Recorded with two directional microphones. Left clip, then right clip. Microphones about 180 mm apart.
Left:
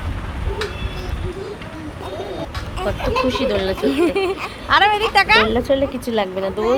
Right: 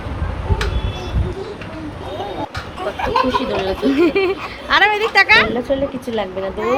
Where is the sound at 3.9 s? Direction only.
10° right (ahead or behind).